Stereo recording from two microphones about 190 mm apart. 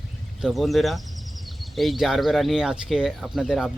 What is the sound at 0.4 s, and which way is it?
Speech, centre (ahead or behind).